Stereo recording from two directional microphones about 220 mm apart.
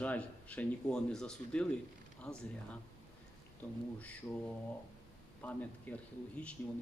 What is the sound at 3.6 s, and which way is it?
Speech, 10° left (ahead or behind).